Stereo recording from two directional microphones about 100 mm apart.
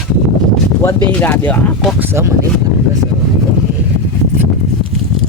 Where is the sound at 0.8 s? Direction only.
20° left (ahead or behind).